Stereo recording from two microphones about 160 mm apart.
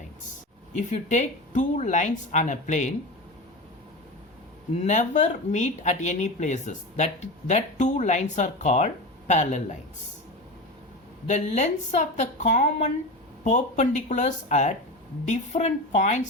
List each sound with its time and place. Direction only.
0.8 s speech: 50° left (ahead or behind)
4.7 s speech: 45° left (ahead or behind)
11.3 s speech: 45° left (ahead or behind)